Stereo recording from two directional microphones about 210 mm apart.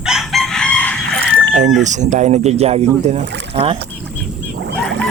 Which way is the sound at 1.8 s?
35° right (ahead or behind).